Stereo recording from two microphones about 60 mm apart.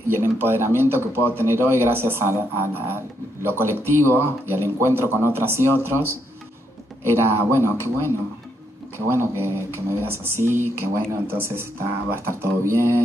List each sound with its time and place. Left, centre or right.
0.1 s a man's voice: right